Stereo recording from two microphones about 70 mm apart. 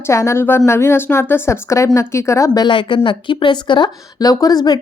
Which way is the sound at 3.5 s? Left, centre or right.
Left.